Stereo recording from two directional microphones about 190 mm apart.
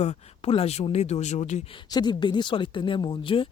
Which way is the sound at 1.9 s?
20° left (ahead or behind).